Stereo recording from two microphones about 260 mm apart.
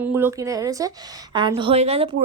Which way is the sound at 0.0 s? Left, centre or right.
Centre.